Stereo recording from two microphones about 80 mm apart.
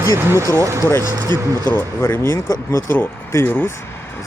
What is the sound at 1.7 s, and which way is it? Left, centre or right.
Speech, left.